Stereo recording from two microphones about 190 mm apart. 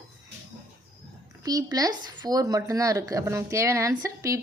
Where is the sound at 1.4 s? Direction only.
20° right (ahead or behind).